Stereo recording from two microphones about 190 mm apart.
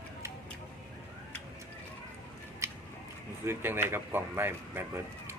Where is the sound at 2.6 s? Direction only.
15° right (ahead or behind).